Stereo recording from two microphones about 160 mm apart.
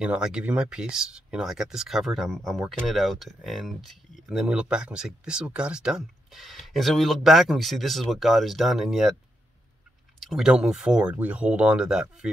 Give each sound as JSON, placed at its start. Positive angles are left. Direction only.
{"t": 0.0, "sound": "speech", "side_deg": -5}
{"t": 10.2, "sound": "speech", "side_deg": 0}